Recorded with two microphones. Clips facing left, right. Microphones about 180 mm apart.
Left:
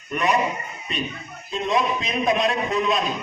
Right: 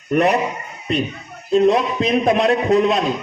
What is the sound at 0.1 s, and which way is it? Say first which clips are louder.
Speech: right 7 dB; 65° right (ahead or behind).